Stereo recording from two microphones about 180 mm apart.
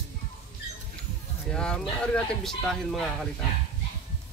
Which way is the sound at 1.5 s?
5° left (ahead or behind).